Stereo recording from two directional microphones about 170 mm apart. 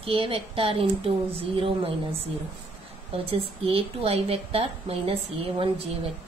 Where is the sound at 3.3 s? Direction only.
35° right (ahead or behind).